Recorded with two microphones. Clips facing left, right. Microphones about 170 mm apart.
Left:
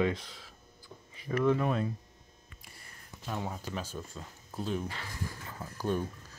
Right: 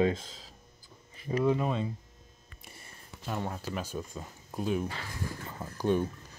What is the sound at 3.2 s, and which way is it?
Speech, centre (ahead or behind).